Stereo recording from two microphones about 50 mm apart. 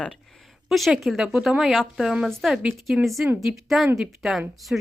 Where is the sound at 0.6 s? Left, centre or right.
Centre.